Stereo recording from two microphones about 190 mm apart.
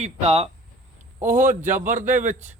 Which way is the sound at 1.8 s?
40° right (ahead or behind).